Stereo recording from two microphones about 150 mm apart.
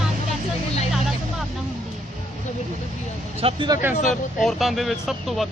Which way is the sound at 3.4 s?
35° right (ahead or behind).